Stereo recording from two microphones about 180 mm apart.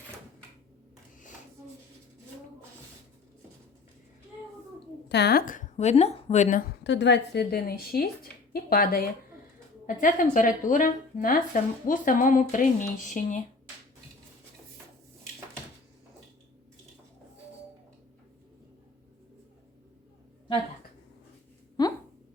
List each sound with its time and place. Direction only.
5.0 s a woman's voice: 65° left (ahead or behind); by 6.7 s 45° left (ahead or behind)
6.8 s a woman's voice: 80° left; by 13.4 s 45° left (ahead or behind)
21.8 s a sound: 20° left (ahead or behind)